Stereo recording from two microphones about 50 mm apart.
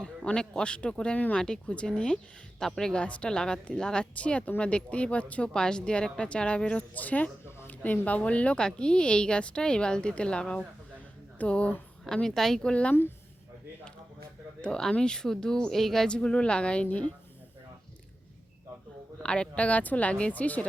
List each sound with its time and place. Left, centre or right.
0.3 s a woman's voice: centre
2.6 s speech: centre
3.0 s a woman's voice: left
6.9 s speech: left
7.7 s a sound: left
8.0 s a woman's voice: left
12.0 s speech: centre
12.6 s a woman's voice: left
14.6 s speech: centre
16.0 s a woman's voice: centre
19.2 s a woman's voice: centre